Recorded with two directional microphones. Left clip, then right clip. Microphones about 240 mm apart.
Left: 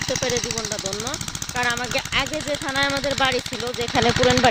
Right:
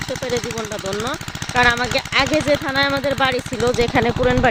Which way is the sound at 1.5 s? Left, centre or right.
Centre.